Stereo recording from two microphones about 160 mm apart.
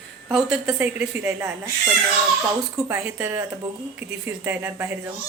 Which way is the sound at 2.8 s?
15° right (ahead or behind).